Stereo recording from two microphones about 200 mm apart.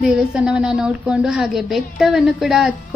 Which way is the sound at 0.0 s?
5° right (ahead or behind).